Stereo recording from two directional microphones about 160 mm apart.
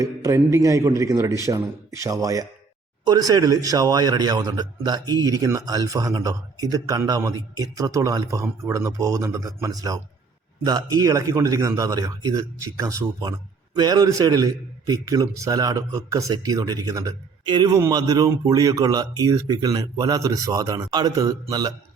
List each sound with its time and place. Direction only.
0.0 s a man's voice: 20° right (ahead or behind)